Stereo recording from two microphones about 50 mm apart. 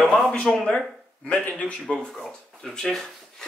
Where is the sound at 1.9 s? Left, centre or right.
Left.